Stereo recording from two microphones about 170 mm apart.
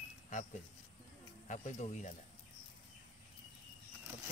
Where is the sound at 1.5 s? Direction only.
45° left (ahead or behind).